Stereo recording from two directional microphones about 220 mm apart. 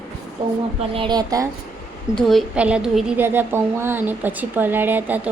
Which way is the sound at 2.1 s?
Centre (ahead or behind).